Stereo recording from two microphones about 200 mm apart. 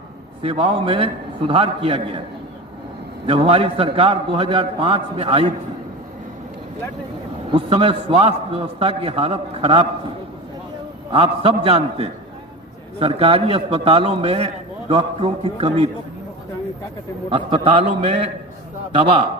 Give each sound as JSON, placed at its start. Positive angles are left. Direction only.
{"t": 0.4, "sound": "a man's voice", "side_deg": -25}
{"t": 3.2, "sound": "a man's voice", "side_deg": -30}
{"t": 7.5, "sound": "a man's voice", "side_deg": -30}
{"t": 11.1, "sound": "a man's voice", "side_deg": -30}
{"t": 17.2, "sound": "a man's voice", "side_deg": -25}